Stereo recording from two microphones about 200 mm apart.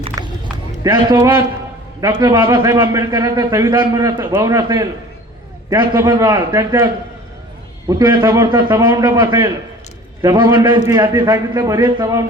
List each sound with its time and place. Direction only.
0.2 s a sound: 20° right (ahead or behind)
0.9 s a man's voice: 20° right (ahead or behind)
7.9 s a man's voice: 20° right (ahead or behind)